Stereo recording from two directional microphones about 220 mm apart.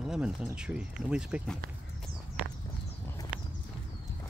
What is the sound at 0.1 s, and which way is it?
Speech, 5° right (ahead or behind).